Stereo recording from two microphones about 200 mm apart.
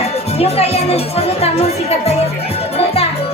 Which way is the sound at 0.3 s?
30° left (ahead or behind).